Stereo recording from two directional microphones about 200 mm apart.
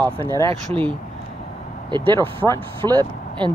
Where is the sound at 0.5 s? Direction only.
25° right (ahead or behind).